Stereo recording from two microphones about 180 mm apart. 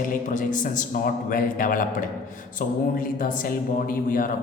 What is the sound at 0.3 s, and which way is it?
Speech, 45° left (ahead or behind).